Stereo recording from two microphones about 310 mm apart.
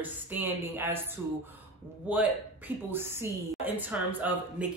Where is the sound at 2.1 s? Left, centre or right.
Centre.